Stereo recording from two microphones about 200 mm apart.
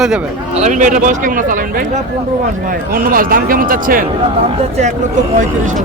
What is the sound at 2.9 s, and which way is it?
Speech, 45° right (ahead or behind).